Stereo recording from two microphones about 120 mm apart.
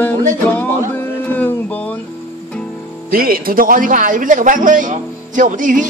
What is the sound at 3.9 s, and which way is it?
Speech, 90° right.